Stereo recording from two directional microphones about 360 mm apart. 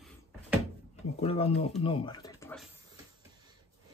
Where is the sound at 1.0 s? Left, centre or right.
Centre.